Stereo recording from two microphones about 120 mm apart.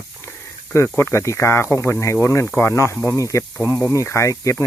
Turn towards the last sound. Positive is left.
turn(degrees=25)  # may be behind; listen again after turning